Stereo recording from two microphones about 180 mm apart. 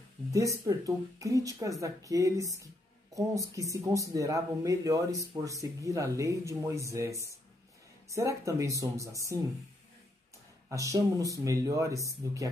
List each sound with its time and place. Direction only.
0.3 s speech: 20° right (ahead or behind)
10.7 s speech: 15° right (ahead or behind)